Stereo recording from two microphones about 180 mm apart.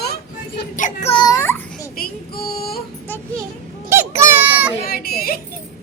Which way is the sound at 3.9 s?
15° right (ahead or behind).